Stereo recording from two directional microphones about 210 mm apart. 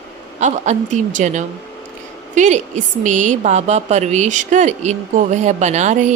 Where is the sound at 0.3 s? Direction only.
35° right (ahead or behind).